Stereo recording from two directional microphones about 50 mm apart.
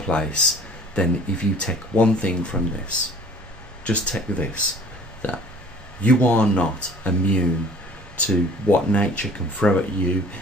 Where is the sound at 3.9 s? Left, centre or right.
Left.